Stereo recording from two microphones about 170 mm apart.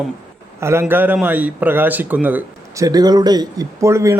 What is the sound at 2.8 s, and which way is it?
Speech, 20° right (ahead or behind).